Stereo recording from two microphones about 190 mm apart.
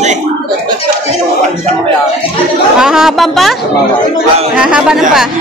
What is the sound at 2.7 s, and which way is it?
Speech, 5° right (ahead or behind).